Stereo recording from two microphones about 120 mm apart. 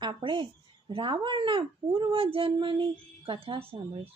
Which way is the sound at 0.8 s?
40° right (ahead or behind).